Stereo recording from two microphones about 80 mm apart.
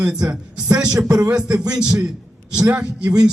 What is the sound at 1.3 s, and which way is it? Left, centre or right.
A man's voice, centre.